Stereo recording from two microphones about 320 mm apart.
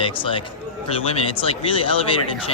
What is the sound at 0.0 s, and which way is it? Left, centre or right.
Speech, centre.